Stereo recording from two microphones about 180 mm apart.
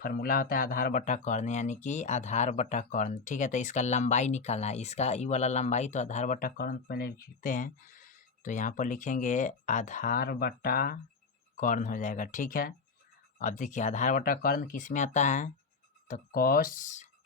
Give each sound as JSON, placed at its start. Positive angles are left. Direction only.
{"t": 0.0, "sound": "speech", "side_deg": 55}